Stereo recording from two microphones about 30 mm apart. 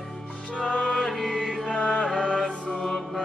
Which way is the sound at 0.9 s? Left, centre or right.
Centre.